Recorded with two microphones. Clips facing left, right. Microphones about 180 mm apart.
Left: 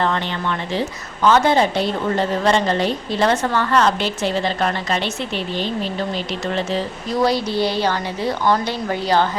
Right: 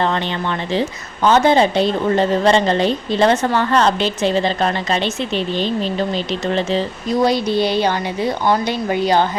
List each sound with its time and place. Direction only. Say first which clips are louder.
0.0 s a woman's voice: right 2 dB; 25° right (ahead or behind)